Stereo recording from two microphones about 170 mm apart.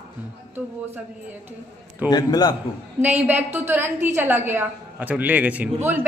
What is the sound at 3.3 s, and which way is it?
A woman's voice, 10° right (ahead or behind).